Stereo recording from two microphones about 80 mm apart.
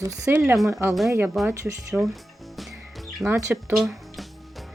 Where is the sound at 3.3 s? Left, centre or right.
Right.